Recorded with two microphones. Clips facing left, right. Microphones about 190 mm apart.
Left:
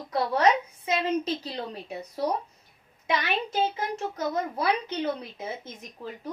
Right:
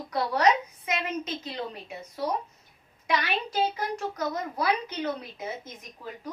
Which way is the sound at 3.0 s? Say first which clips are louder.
Left 1 dB; 25° left (ahead or behind).